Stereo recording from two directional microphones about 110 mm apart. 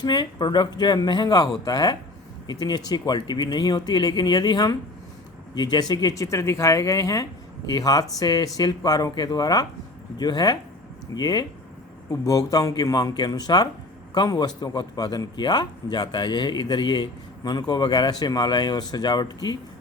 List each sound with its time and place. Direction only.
0.0 s a man's voice: 40° left (ahead or behind)